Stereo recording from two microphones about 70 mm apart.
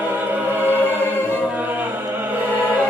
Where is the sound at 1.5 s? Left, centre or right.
Right.